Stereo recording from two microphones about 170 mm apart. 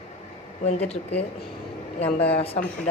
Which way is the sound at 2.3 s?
35° left (ahead or behind).